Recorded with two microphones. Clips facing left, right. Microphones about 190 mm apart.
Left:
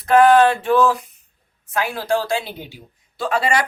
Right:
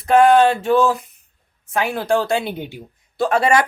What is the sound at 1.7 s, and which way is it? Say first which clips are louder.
A woman's voice: right 2 dB; 55° right (ahead or behind).